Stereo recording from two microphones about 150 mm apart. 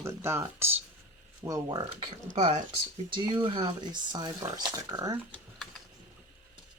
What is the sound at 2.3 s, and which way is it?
Speech, 55° right (ahead or behind).